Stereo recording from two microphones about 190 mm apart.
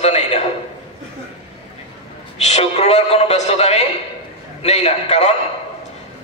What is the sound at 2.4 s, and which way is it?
A man's voice, 35° left (ahead or behind).